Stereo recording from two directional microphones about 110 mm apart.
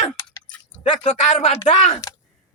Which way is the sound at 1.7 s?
90° left.